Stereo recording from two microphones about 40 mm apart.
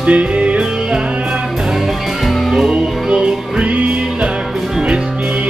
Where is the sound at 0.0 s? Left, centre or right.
Right.